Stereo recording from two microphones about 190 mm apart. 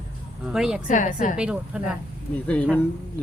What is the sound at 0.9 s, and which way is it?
Speech, 40° left (ahead or behind).